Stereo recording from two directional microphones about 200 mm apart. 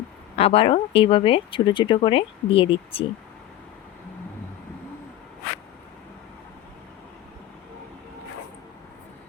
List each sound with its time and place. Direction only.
0.3 s speech: 30° left (ahead or behind)